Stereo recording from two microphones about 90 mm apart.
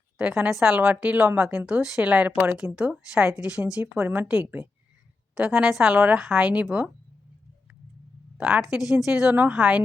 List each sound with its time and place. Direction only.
0.4 s a woman's voice: 5° right (ahead or behind)
8.4 s a woman's voice: 10° right (ahead or behind)
9.3 s a woman's voice: 20° right (ahead or behind)